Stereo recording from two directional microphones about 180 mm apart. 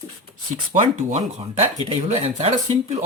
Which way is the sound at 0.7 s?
40° right (ahead or behind).